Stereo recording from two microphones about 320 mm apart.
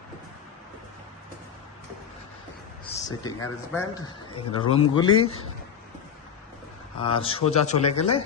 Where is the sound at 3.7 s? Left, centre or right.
Centre.